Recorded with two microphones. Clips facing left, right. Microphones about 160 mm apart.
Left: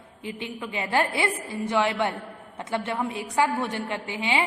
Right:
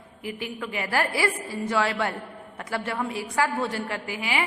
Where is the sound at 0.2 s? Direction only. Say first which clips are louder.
Right 1 dB; 25° left (ahead or behind).